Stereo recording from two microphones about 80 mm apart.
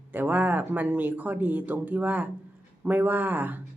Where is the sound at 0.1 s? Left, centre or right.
Right.